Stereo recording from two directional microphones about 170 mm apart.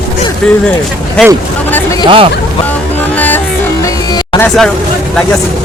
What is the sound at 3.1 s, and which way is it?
Music, 10° left (ahead or behind).